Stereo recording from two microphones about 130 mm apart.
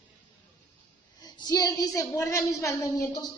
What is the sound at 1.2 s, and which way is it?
A woman's voice, 30° left (ahead or behind).